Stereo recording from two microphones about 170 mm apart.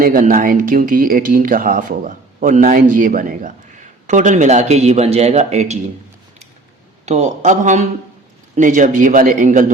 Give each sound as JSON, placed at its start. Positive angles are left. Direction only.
{"t": 0.0, "sound": "speech", "side_deg": -55}
{"t": 7.0, "sound": "speech", "side_deg": -40}